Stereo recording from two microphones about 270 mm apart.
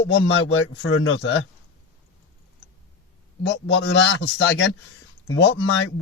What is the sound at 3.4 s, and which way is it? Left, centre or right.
Speech, left.